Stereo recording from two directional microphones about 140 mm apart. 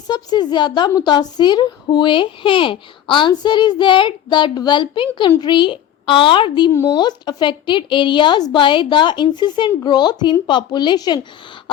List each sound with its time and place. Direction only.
0.1 s a woman's voice: 30° left (ahead or behind)